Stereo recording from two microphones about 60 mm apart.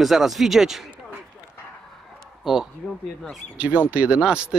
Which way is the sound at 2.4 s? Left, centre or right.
Centre.